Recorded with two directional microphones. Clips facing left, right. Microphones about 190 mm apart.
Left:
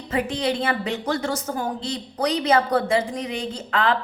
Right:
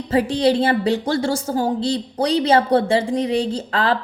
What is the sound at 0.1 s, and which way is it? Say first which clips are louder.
A woman's voice: right 7 dB; 30° right (ahead or behind).